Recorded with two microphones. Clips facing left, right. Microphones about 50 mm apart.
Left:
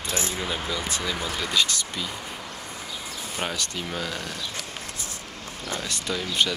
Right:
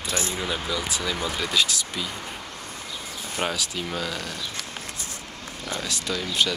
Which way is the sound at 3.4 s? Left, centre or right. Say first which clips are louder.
Right 3 dB; centre.